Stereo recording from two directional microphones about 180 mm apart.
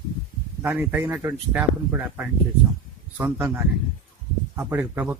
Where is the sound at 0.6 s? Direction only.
10° right (ahead or behind).